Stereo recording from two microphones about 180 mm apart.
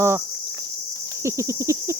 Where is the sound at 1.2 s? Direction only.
15° right (ahead or behind).